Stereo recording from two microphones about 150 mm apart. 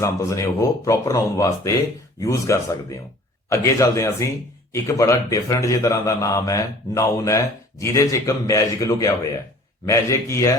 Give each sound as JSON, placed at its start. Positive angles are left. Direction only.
{"t": 0.0, "sound": "a man's voice", "side_deg": 20}